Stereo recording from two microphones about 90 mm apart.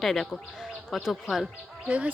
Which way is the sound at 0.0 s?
5° left (ahead or behind).